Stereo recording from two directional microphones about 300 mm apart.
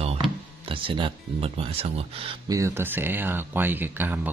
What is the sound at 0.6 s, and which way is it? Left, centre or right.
Speech, centre.